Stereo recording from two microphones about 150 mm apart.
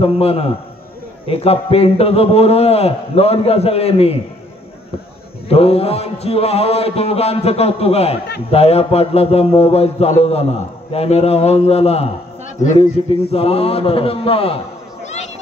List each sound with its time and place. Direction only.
0.0 s a man's voice: 40° left (ahead or behind)
5.5 s mantra: 40° left (ahead or behind)
12.7 s a man's voice: 40° left (ahead or behind)